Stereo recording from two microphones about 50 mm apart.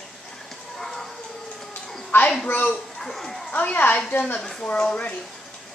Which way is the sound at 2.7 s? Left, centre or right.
Centre.